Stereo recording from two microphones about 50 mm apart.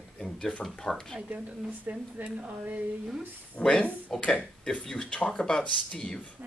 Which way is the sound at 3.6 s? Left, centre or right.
Centre.